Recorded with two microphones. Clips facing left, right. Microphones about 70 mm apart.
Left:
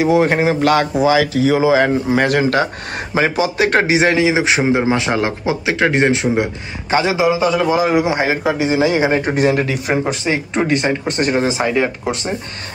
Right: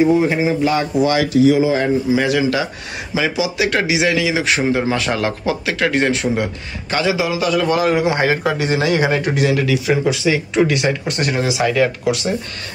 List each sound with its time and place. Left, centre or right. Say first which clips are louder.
0.0 s speech: left 1 dB; left
1.8 s a man's voice: left 2 dB; left
9.3 s speech: left 1 dB; left
11.6 s a man's voice: right 1 dB; left
12.0 s speech: right 2 dB; left